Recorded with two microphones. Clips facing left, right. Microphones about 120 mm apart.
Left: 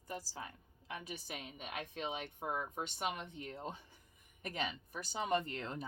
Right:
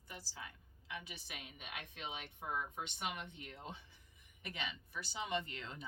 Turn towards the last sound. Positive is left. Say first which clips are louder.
# left 4 dB
turn(degrees=45)  # may be behind; listen again after turning